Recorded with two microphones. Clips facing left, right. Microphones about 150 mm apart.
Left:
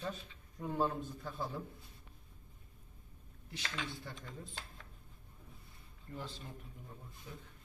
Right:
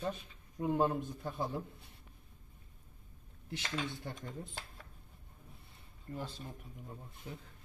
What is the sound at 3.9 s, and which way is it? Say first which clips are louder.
Speech: right 4 dB; 20° right (ahead or behind).